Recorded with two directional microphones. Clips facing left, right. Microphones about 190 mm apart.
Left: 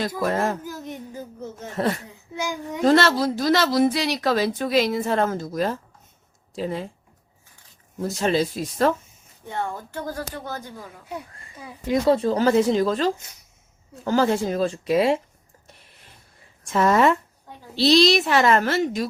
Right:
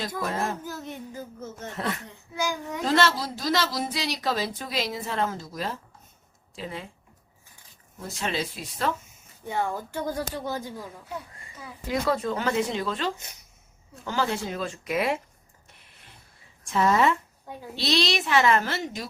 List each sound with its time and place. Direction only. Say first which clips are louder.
0.3 s speech: left 6 dB; 65° left (ahead or behind)
0.6 s speech: left 2 dB; 15° left (ahead or behind)
1.7 s speech: left 8 dB; 35° left (ahead or behind)
2.3 s a child's voice: left 1 dB; 20° left (ahead or behind)
2.8 s speech: left 6 dB; 55° left (ahead or behind)
8.0 s speech: left 9 dB; 40° left (ahead or behind)
9.5 s speech: right 1 dB; 10° right (ahead or behind)
11.1 s speech: left 3 dB; 15° left (ahead or behind)
16.7 s a woman's voice: left 4 dB; 55° left (ahead or behind)
17.7 s a woman's voice: left 9 dB; 35° left (ahead or behind)